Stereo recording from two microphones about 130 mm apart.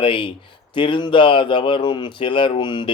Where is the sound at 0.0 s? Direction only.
40° left (ahead or behind).